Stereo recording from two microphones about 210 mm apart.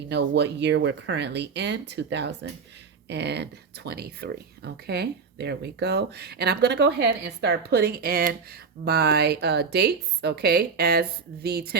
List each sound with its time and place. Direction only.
0.1 s speech: 55° right (ahead or behind)